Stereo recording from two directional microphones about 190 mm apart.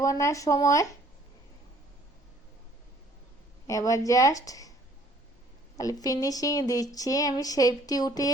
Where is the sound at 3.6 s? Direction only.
15° left (ahead or behind).